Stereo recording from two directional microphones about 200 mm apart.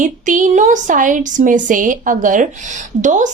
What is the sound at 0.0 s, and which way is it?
Speech, 40° right (ahead or behind).